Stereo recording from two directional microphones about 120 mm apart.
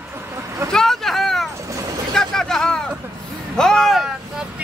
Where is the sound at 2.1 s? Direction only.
5° left (ahead or behind).